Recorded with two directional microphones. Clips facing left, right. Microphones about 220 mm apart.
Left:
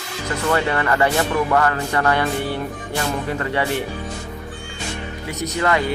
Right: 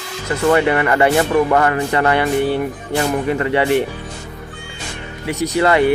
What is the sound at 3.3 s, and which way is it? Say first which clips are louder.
Speech: right 6 dB; 20° right (ahead or behind).